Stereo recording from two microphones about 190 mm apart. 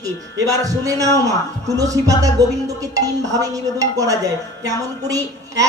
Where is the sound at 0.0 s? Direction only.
20° right (ahead or behind).